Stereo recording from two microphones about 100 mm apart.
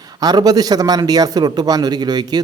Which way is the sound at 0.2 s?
40° right (ahead or behind).